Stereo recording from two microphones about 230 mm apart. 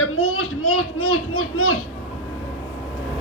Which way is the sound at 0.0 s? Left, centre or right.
Left.